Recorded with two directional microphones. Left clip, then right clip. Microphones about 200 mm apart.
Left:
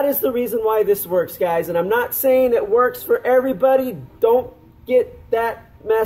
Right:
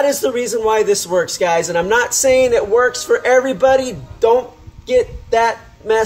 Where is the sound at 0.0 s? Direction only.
15° right (ahead or behind).